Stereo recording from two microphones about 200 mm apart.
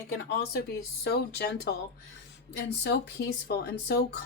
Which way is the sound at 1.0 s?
55° left (ahead or behind).